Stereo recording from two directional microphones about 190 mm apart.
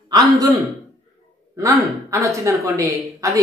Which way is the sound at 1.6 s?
15° right (ahead or behind).